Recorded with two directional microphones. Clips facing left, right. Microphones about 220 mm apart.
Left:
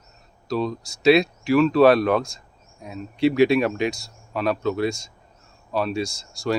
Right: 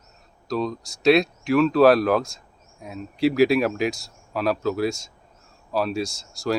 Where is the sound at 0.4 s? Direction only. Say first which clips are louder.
Left 1 dB; centre (ahead or behind).